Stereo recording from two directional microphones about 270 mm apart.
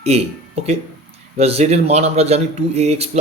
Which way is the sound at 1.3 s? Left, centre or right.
Right.